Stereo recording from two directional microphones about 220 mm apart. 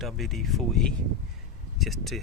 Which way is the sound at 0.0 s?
Centre (ahead or behind).